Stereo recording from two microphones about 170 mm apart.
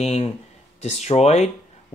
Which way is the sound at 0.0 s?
40° left (ahead or behind).